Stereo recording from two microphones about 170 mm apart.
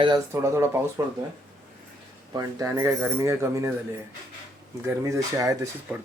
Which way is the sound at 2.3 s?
20° right (ahead or behind).